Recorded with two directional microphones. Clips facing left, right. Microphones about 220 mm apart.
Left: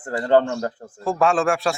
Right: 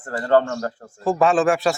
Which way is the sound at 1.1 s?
Centre (ahead or behind).